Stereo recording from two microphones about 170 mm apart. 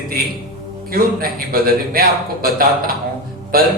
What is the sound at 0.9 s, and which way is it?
A man's voice, 60° right (ahead or behind).